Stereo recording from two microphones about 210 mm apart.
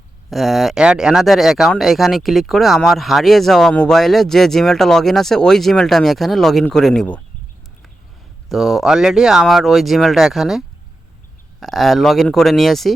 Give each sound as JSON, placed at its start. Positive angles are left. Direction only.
{"t": 0.3, "sound": "speech", "side_deg": 0}
{"t": 8.4, "sound": "speech", "side_deg": 0}
{"t": 11.6, "sound": "speech", "side_deg": 0}